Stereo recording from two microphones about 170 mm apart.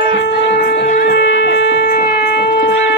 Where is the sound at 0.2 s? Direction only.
65° left (ahead or behind).